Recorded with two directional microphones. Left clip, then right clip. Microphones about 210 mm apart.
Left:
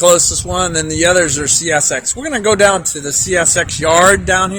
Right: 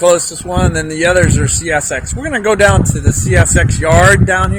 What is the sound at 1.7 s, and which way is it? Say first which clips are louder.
Speech: right 2 dB; 10° left (ahead or behind).